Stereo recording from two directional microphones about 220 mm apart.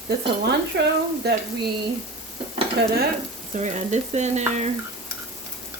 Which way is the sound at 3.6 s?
30° right (ahead or behind).